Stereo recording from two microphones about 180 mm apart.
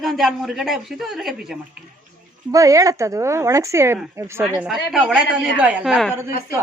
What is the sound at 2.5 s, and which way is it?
A woman's voice, 20° right (ahead or behind).